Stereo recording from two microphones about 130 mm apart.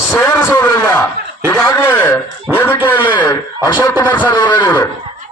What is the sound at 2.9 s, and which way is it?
Speech, 35° left (ahead or behind).